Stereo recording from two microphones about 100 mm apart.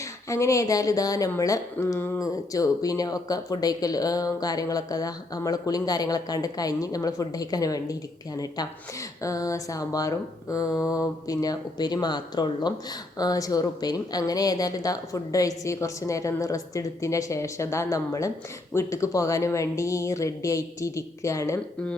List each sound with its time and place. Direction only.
0.3 s speech: 30° left (ahead or behind)
9.2 s speech: 35° left (ahead or behind)